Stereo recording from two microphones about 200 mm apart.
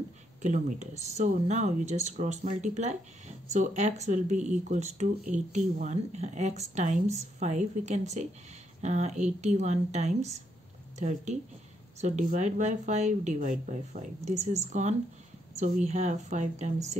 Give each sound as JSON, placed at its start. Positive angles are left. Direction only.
{"t": 0.4, "sound": "speech", "side_deg": -35}